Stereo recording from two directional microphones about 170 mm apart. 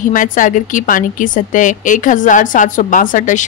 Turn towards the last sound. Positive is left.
turn(degrees=50)  # may be behind; listen again after turning